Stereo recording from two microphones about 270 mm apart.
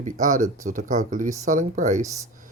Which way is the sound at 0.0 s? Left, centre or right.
Right.